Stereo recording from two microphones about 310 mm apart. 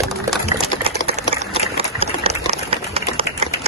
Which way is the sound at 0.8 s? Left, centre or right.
Centre.